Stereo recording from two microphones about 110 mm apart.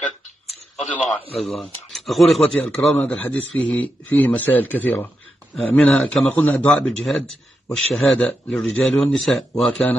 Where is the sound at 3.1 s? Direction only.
15° left (ahead or behind).